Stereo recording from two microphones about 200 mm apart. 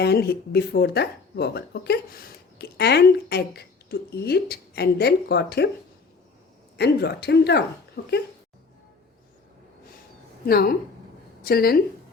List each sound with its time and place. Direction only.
0.0 s speech: 55° left (ahead or behind)
6.7 s a woman's voice: 55° left (ahead or behind)
10.4 s speech: 50° left (ahead or behind)